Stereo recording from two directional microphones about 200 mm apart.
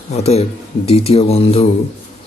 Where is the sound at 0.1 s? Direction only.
30° left (ahead or behind).